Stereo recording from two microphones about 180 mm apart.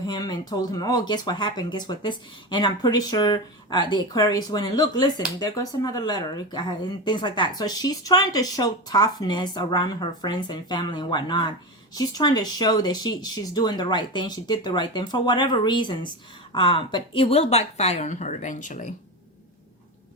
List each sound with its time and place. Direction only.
0.0 s speech: 20° left (ahead or behind); by 18.9 s 45° left (ahead or behind)